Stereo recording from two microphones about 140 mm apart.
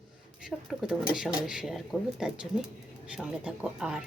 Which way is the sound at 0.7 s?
5° right (ahead or behind).